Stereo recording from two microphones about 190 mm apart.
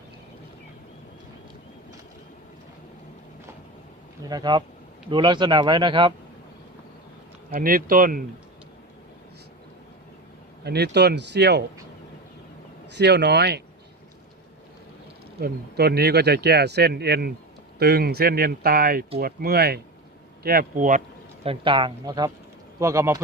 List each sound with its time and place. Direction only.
4.3 s a man's voice: 20° right (ahead or behind)
7.5 s speech: 50° right (ahead or behind)
10.6 s speech: 60° right (ahead or behind)
12.9 s speech: 65° right (ahead or behind)
15.4 s speech: 55° right (ahead or behind)
21.4 s a man's voice: 30° right (ahead or behind)